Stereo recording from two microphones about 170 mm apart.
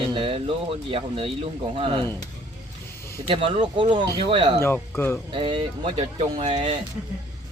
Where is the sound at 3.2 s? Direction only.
35° right (ahead or behind).